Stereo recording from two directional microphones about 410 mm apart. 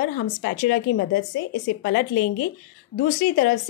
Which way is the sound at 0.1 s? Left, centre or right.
Left.